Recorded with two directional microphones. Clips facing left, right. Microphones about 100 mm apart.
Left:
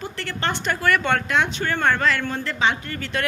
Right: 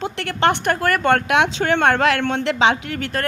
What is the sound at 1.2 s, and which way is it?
A woman's voice, 70° right (ahead or behind).